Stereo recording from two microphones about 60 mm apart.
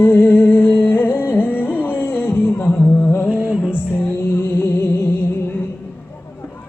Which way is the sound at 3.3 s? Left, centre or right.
Centre.